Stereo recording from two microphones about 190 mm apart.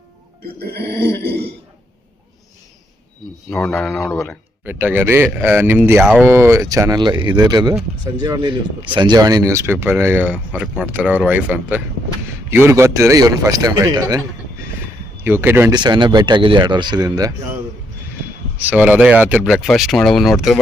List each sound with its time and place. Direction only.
0.7 s a sound: 55° right (ahead or behind)
3.5 s speech: 5° left (ahead or behind); by 14.2 s 20° right (ahead or behind)
15.2 s speech: 10° right (ahead or behind)
15.7 s speech: 25° right (ahead or behind); by 20.6 s centre (ahead or behind)